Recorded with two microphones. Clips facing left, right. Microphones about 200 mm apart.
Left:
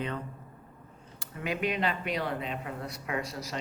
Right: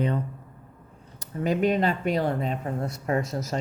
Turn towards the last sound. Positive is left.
turn(degrees=-45)  # may be behind; listen again after turning